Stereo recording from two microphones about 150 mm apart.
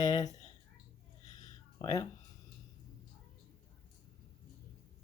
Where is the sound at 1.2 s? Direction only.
25° left (ahead or behind).